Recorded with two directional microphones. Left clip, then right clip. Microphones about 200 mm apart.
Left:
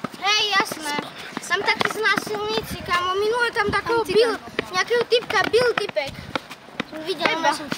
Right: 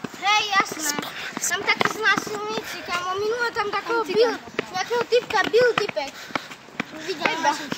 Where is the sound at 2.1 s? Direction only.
40° left (ahead or behind).